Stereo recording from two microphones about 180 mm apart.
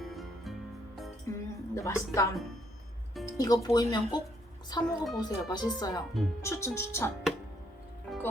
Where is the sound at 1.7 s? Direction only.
15° left (ahead or behind).